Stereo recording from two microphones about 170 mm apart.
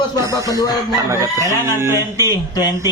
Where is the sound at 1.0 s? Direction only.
20° right (ahead or behind).